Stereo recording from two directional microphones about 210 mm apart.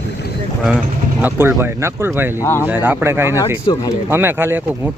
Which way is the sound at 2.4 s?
10° left (ahead or behind).